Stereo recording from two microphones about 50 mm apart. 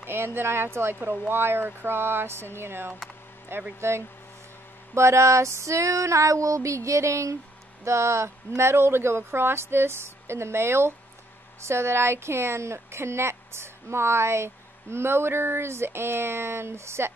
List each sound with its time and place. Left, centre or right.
0.0 s speech: right
4.9 s female singing: right
7.8 s speech: right